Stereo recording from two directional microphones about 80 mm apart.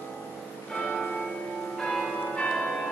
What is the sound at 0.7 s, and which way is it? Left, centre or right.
Change ringing, centre.